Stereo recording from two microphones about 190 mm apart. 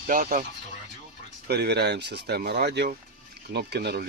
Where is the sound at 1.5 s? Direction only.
60° right (ahead or behind).